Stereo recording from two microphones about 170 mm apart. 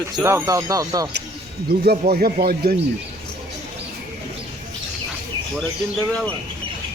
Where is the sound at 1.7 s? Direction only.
70° right (ahead or behind).